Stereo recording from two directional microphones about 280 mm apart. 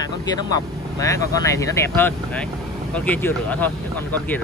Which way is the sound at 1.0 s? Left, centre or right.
Centre.